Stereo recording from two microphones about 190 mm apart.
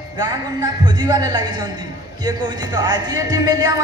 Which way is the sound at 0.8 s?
20° right (ahead or behind).